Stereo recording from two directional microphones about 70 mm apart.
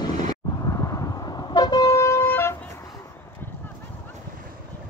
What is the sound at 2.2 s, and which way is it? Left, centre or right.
Vehicle, left.